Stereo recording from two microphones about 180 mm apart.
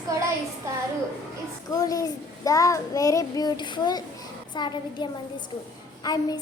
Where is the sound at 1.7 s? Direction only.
20° left (ahead or behind).